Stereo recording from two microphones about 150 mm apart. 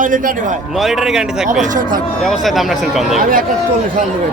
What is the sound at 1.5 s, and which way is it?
Speech, 60° right (ahead or behind).